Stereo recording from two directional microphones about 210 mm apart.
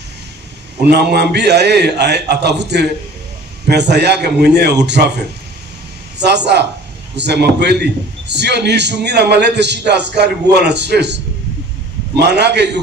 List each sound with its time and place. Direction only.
0.8 s a man's voice: 50° right (ahead or behind)
6.1 s a man's voice: 55° right (ahead or behind)